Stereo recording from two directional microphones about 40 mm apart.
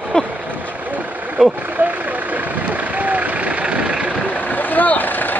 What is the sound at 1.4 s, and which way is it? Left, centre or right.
Speech, right.